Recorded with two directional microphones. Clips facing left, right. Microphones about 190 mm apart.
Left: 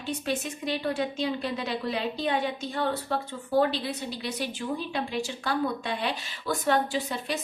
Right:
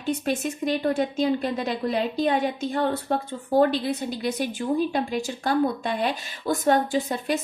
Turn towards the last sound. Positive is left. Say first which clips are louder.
# right 4 dB
turn(degrees=-45)  # may be behind; listen again after turning